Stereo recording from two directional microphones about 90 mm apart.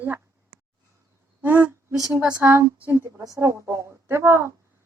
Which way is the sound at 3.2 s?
40° right (ahead or behind).